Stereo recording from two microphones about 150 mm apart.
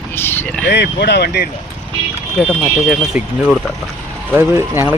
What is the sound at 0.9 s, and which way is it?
Speech, 90° left.